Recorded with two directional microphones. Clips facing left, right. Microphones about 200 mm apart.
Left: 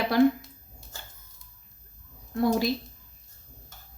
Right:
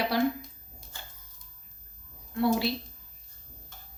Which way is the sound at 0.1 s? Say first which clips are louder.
Left 8 dB; 50° left (ahead or behind).